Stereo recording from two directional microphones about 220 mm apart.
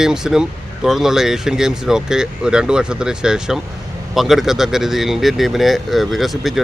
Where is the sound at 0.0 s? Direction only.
Centre (ahead or behind).